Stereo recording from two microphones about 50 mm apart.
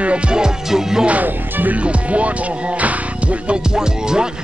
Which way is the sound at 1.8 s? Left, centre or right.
Right.